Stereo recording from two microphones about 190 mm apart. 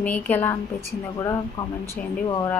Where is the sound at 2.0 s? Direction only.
5° left (ahead or behind).